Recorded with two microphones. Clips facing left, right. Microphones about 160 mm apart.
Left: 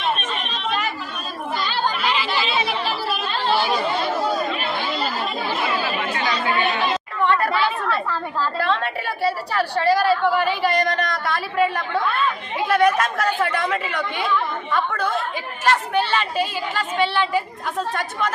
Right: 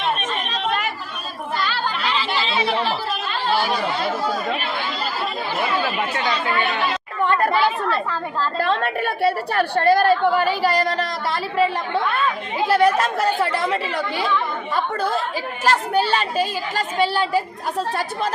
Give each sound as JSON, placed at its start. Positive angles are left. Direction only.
{"t": 1.5, "sound": "chatter", "side_deg": 20}
{"t": 2.2, "sound": "chatter", "side_deg": -25}
{"t": 7.3, "sound": "a sound", "side_deg": -45}
{"t": 8.6, "sound": "a woman's voice", "side_deg": -50}